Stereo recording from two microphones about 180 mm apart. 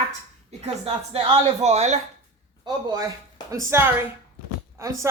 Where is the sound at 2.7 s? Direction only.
20° right (ahead or behind).